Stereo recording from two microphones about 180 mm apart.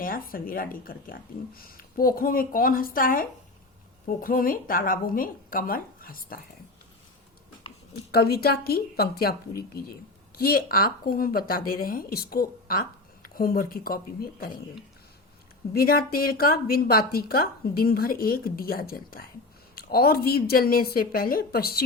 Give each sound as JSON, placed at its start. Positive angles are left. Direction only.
{"t": 0.0, "sound": "speech", "side_deg": 50}
{"t": 8.1, "sound": "a woman's voice", "side_deg": 60}
{"t": 10.3, "sound": "speech", "side_deg": 55}
{"t": 15.7, "sound": "a woman's voice", "side_deg": 55}